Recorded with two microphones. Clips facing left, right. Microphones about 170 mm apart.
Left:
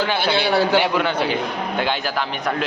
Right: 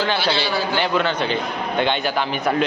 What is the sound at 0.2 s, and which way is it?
Speech, 55° left (ahead or behind).